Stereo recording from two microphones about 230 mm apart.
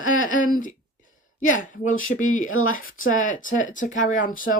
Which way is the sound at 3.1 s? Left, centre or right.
Left.